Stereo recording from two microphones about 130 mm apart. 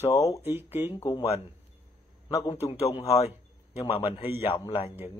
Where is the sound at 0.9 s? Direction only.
40° left (ahead or behind).